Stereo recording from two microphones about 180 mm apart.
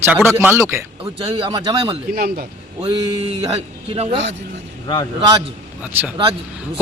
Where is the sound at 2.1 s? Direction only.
60° right (ahead or behind).